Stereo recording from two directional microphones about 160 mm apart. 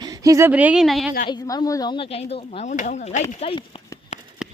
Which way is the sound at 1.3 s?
25° left (ahead or behind).